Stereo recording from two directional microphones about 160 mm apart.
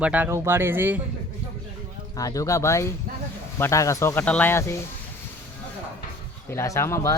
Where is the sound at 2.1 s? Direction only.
20° left (ahead or behind).